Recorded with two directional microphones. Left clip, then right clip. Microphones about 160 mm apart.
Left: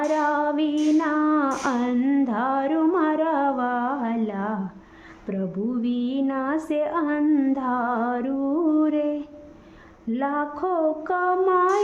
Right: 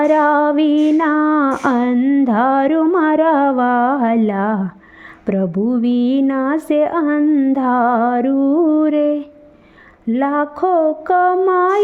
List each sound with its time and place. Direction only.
0.0 s speech: 40° right (ahead or behind)
2.0 s music: 25° right (ahead or behind)
2.2 s speech: 40° right (ahead or behind)
2.9 s a sound: 40° right (ahead or behind)
5.2 s speech: 45° right (ahead or behind)
7.3 s music: 25° right (ahead or behind)
7.5 s speech: 40° right (ahead or behind)